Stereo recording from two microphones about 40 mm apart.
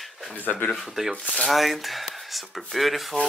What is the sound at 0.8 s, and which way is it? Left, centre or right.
Speech, centre.